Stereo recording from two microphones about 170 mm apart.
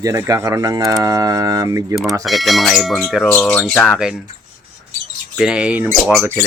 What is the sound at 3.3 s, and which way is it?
Speech, 10° left (ahead or behind).